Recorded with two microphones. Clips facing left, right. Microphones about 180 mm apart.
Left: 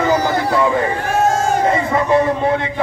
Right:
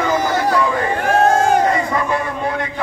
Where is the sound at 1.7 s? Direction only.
25° left (ahead or behind).